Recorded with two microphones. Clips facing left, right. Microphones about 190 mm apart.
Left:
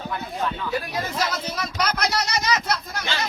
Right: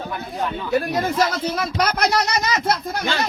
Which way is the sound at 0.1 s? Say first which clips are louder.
Right 1 dB; 15° right (ahead or behind).